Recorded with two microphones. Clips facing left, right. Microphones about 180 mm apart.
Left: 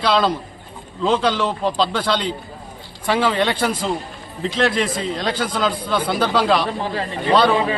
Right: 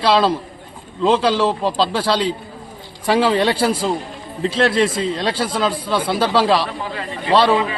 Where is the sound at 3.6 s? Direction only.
30° right (ahead or behind).